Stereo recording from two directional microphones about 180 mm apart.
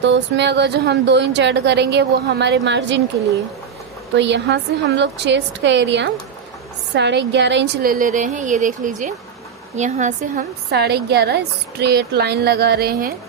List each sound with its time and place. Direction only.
0.0 s a woman's voice: 75° right (ahead or behind)
4.1 s a woman's voice: 75° right (ahead or behind); by 10.4 s 40° right (ahead or behind)
10.7 s speech: 65° right (ahead or behind)